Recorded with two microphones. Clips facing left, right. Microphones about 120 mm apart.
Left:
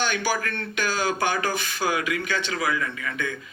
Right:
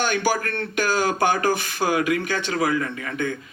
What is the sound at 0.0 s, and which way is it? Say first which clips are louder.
A man's voice: right 3 dB; 45° right (ahead or behind).